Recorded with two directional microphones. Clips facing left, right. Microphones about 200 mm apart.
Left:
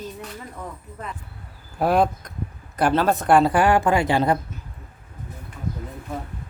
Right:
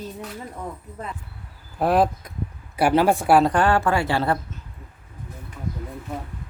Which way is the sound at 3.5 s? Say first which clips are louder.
Left 2 dB; 10° left (ahead or behind).